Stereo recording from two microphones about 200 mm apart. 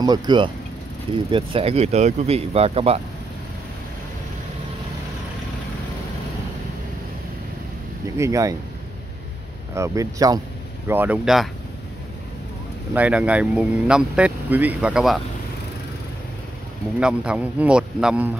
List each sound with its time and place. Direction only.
0.0 s speech: 20° right (ahead or behind)
8.2 s speech: 15° right (ahead or behind)
9.8 s speech: 15° right (ahead or behind)
12.9 s speech: 5° right (ahead or behind)
17.0 s speech: 5° right (ahead or behind)